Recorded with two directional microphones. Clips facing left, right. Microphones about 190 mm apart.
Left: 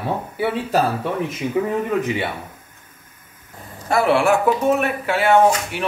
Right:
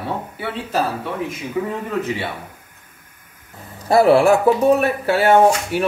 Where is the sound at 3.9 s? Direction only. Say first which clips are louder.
Right 4 dB; 35° right (ahead or behind).